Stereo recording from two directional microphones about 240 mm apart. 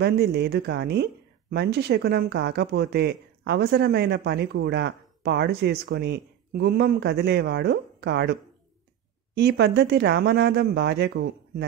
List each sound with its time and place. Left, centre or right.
0.0 s speech: right